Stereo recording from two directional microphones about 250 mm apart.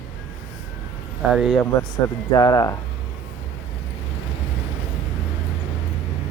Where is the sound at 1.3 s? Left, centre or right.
Centre.